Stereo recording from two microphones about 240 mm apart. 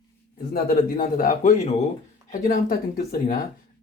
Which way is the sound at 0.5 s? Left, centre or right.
Left.